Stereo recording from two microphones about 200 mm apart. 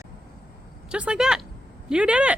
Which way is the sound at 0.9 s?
5° right (ahead or behind).